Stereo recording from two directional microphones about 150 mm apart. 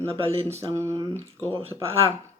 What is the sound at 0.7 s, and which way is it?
Speech, 20° right (ahead or behind).